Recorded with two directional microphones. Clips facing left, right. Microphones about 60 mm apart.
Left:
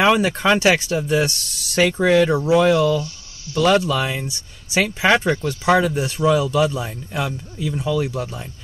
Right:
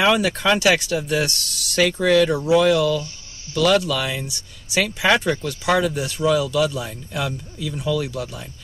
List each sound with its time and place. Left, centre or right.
0.0 s speech: left